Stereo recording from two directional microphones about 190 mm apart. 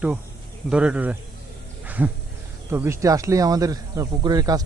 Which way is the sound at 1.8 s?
10° right (ahead or behind).